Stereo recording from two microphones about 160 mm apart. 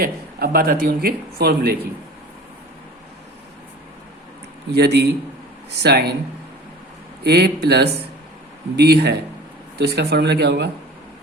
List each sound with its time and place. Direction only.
0.0 s speech: 70° right (ahead or behind)
4.7 s speech: 90° right
7.3 s speech: 90° right